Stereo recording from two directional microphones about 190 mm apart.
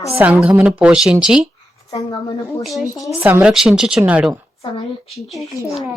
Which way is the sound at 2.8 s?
15° left (ahead or behind).